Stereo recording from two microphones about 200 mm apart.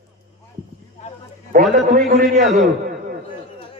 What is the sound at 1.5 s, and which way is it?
Speech, 45° right (ahead or behind).